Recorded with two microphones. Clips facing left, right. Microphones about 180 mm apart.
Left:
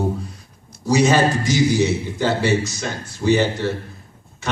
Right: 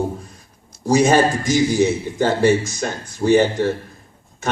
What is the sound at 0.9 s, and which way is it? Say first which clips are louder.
A man's voice: right 2 dB; 50° right (ahead or behind).